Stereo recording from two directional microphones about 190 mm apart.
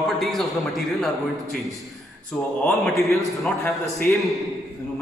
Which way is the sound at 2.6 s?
Centre (ahead or behind).